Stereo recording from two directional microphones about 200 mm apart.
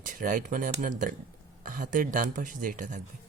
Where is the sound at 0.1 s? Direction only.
40° right (ahead or behind).